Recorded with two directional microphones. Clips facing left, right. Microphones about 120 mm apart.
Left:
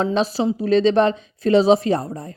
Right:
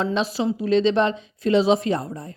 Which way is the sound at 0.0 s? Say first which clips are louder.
Left 3 dB; 35° left (ahead or behind).